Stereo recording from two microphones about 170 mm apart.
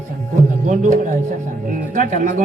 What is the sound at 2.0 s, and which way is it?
Speech, 50° right (ahead or behind).